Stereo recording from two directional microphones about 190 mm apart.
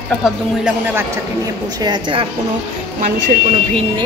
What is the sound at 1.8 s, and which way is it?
Speech, 25° right (ahead or behind).